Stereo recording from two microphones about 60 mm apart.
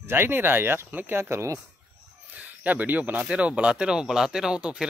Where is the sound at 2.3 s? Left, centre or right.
Right.